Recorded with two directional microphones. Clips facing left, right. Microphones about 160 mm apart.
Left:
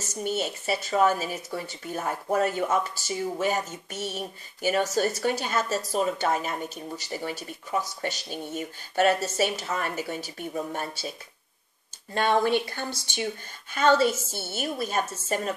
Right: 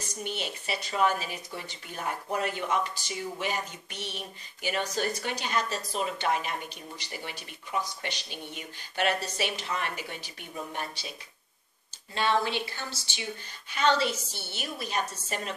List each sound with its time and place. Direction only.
0.0 s a woman's voice: 45° left (ahead or behind)